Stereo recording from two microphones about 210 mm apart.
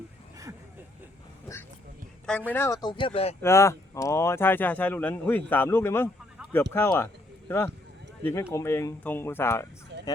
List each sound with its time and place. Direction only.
2.5 s speech: 10° left (ahead or behind); by 3.3 s 30° left (ahead or behind)
3.4 s speech: 15° left (ahead or behind)